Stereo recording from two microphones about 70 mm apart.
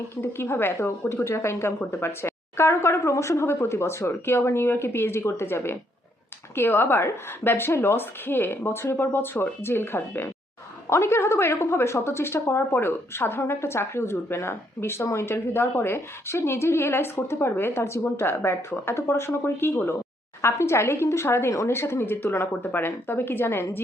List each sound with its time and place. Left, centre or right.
0.2 s a woman's voice: left